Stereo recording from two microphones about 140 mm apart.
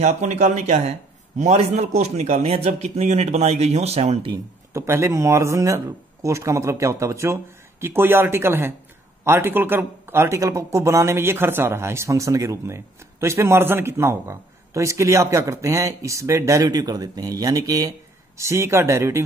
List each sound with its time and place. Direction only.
0.0 s speech: 55° right (ahead or behind)
4.3 s speech: 20° right (ahead or behind)